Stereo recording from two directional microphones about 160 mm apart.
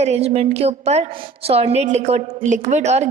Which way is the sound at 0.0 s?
40° right (ahead or behind).